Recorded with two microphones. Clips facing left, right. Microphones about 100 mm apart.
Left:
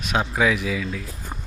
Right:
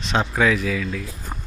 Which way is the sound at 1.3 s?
5° right (ahead or behind).